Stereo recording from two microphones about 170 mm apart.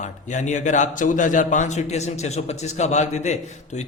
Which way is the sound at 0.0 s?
45° left (ahead or behind).